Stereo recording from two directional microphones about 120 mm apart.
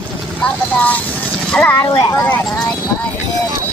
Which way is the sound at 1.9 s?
35° left (ahead or behind).